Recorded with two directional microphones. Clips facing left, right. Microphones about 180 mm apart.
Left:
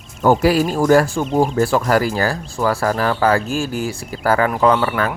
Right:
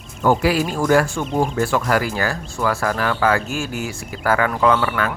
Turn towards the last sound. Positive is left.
turn(degrees=35)  # may be behind; listen again after turning